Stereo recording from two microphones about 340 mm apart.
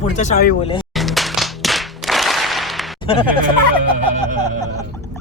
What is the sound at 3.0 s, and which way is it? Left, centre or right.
Speech, centre.